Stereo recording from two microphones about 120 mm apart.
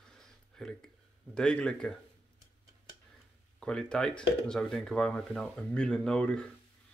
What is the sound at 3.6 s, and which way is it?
Speech, 5° left (ahead or behind).